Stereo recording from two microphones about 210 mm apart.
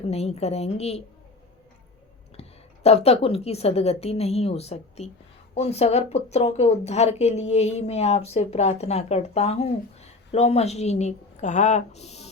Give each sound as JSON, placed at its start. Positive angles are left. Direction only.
{"t": 0.1, "sound": "a woman's voice", "side_deg": 30}
{"t": 2.3, "sound": "a woman's voice", "side_deg": 30}